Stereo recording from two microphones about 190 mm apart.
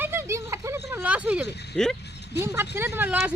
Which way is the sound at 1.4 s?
60° left (ahead or behind).